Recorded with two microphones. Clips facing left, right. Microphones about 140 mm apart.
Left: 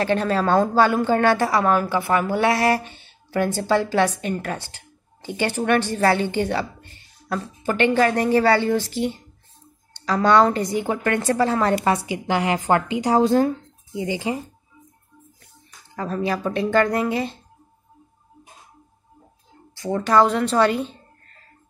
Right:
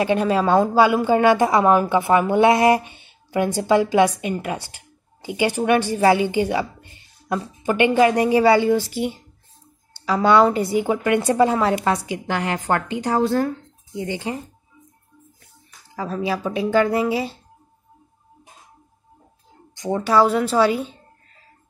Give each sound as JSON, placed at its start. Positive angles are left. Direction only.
{"t": 0.0, "sound": "a woman's voice", "side_deg": -15}
{"t": 11.8, "sound": "a woman's voice", "side_deg": 5}
{"t": 16.0, "sound": "a woman's voice", "side_deg": -5}
{"t": 19.7, "sound": "a woman's voice", "side_deg": -15}